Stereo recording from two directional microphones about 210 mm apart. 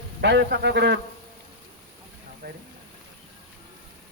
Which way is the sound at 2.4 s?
50° right (ahead or behind).